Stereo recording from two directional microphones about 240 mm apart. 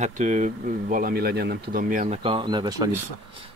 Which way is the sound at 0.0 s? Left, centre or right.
Right.